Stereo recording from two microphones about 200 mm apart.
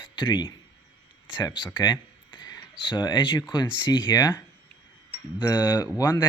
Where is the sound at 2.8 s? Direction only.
20° left (ahead or behind).